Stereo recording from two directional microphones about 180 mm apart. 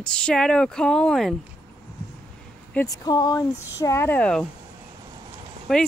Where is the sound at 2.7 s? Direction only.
15° left (ahead or behind).